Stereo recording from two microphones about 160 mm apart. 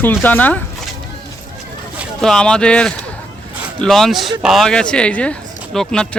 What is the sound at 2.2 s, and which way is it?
Speech, 5° left (ahead or behind).